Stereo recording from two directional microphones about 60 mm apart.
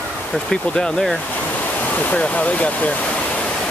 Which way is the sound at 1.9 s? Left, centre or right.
Left.